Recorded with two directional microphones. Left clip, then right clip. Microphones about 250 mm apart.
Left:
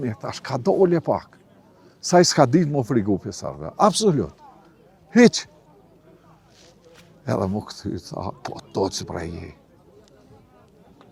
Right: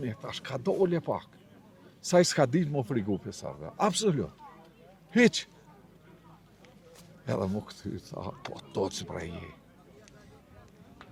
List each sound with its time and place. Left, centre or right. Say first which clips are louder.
0.0 s speech: left 8 dB; left
7.3 s speech: left 8 dB; left